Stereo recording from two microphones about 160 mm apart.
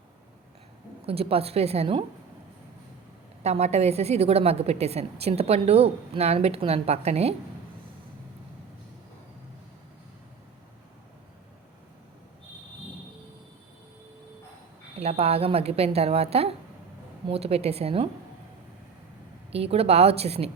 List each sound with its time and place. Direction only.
1.0 s a woman's voice: 35° right (ahead or behind)
3.4 s a woman's voice: 40° right (ahead or behind)
14.9 s a woman's voice: 40° right (ahead or behind)
19.5 s a woman's voice: 40° right (ahead or behind)